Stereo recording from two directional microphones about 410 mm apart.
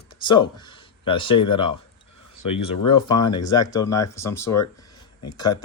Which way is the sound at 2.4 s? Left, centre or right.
Left.